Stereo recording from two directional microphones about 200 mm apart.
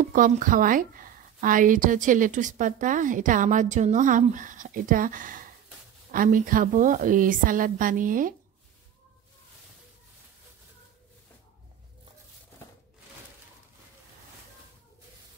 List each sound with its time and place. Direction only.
0.0 s a woman's voice: 40° right (ahead or behind)